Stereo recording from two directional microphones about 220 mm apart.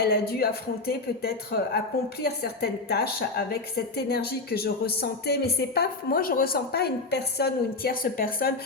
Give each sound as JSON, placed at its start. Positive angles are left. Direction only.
{"t": 0.0, "sound": "a woman's voice", "side_deg": 45}